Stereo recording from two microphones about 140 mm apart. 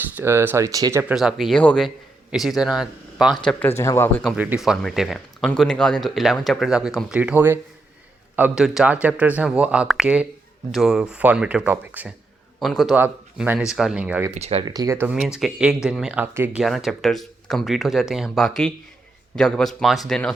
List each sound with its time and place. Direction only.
0.2 s speech: 15° right (ahead or behind)
1.0 s speech: 5° right (ahead or behind)
3.8 s speech: 20° left (ahead or behind)
4.4 s speech: 10° right (ahead or behind)
12.5 s a man's voice: centre (ahead or behind)
13.0 s speech: 10° right (ahead or behind)
14.3 s speech: 50° right (ahead or behind)
14.6 s speech: 30° right (ahead or behind)
14.9 s speech: 10° right (ahead or behind)
15.2 s speech: centre (ahead or behind)
16.2 s speech: 15° right (ahead or behind)
16.6 s speech: centre (ahead or behind)